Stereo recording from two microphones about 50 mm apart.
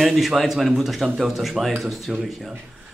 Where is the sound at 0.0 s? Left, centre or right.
Centre.